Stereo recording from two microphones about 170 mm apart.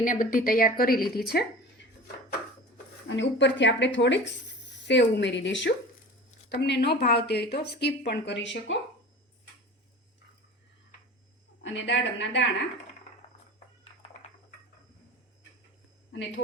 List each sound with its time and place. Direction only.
0.0 s a woman's voice: 55° left (ahead or behind)
3.1 s speech: 90° left
11.6 s speech: 90° left